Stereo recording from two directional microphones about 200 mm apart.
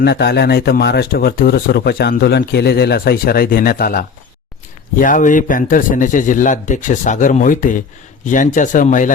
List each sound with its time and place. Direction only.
0.0 s speech: 55° left (ahead or behind)